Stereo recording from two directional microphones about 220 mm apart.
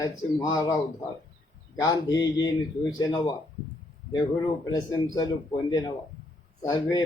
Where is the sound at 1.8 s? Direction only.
15° left (ahead or behind).